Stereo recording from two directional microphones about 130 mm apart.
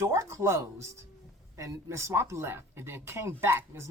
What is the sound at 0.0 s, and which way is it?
A child's voice, 20° right (ahead or behind).